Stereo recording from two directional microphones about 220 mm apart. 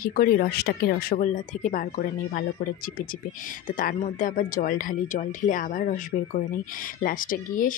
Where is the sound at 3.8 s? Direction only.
40° left (ahead or behind).